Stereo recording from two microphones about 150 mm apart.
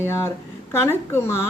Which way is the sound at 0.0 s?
15° left (ahead or behind).